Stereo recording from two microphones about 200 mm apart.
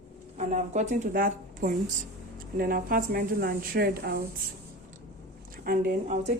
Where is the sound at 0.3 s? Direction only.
35° right (ahead or behind).